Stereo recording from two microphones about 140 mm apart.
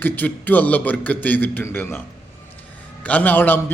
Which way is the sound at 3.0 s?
10° left (ahead or behind).